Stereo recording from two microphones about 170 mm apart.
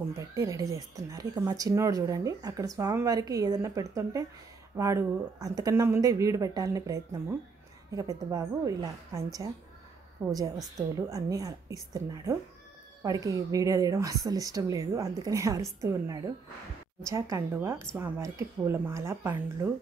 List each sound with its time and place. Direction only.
0.1 s speech: 20° right (ahead or behind)